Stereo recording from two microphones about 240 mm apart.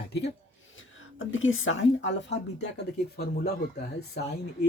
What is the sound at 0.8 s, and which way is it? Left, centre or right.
Speech, left.